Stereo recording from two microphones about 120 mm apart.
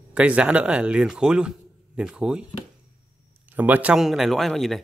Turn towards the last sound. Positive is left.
turn(degrees=0)  # may be behind; listen again after turning